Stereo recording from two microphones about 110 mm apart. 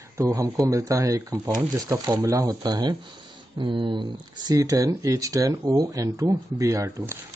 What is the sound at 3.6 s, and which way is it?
Speech, 50° right (ahead or behind).